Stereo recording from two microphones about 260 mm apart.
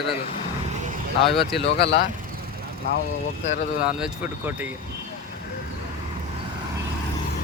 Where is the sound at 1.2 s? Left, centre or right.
Centre.